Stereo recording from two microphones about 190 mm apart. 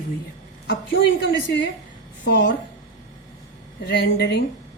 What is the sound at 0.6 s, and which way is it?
A woman's voice, 70° left (ahead or behind).